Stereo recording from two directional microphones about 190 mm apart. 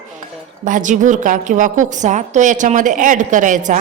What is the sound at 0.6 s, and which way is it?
A woman's voice, 40° right (ahead or behind).